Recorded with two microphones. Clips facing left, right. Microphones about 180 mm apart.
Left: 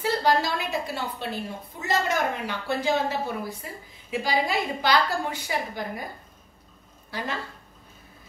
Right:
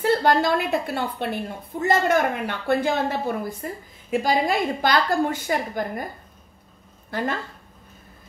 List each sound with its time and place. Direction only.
0.0 s a woman's voice: 55° right (ahead or behind)
7.1 s speech: 50° right (ahead or behind)